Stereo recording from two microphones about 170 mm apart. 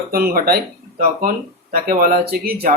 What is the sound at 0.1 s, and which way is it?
Speech, 60° right (ahead or behind).